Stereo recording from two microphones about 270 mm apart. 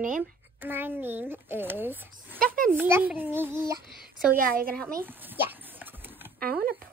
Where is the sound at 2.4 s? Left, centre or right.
Right.